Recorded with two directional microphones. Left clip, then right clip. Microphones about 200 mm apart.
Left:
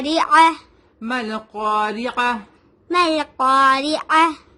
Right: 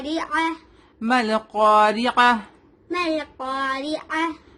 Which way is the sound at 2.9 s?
55° left (ahead or behind).